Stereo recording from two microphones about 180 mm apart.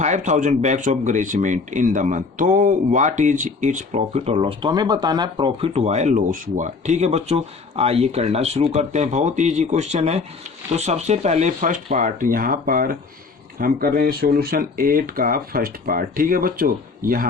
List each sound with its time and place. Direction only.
0.0 s speech: 40° right (ahead or behind)